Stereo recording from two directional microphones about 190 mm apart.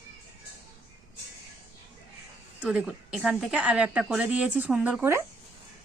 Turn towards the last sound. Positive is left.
turn(degrees=-10)  # may be behind; listen again after turning